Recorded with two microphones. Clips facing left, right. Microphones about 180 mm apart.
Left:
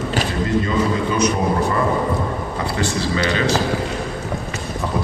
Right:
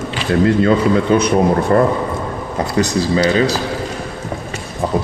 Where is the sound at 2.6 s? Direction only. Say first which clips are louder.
Right 7 dB; 40° right (ahead or behind).